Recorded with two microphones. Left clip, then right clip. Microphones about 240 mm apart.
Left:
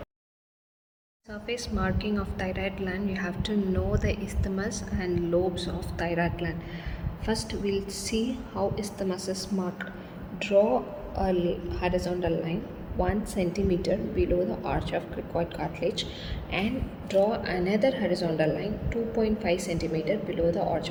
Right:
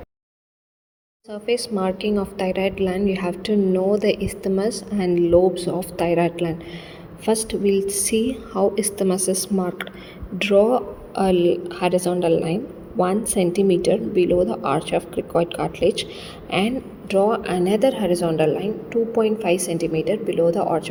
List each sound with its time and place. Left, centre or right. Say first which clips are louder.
1.3 s a woman's voice: right 11 dB; right
10.3 s a man's voice: right 6 dB; right